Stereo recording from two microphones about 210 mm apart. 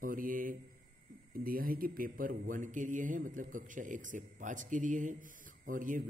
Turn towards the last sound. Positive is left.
turn(degrees=-40)  # may be behind; listen again after turning